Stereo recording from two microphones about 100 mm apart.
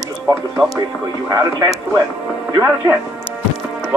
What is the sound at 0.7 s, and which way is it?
Speech, 35° right (ahead or behind).